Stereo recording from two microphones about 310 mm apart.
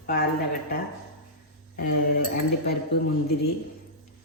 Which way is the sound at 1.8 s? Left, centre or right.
Left.